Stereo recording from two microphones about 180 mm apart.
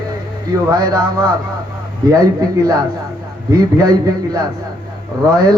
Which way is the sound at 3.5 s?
20° right (ahead or behind).